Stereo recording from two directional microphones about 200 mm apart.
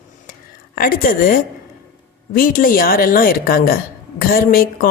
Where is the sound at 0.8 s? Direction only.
45° left (ahead or behind).